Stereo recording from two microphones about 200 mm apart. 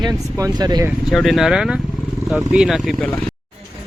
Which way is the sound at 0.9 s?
Centre (ahead or behind).